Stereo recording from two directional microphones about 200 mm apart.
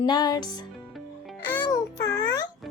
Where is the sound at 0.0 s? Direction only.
20° left (ahead or behind).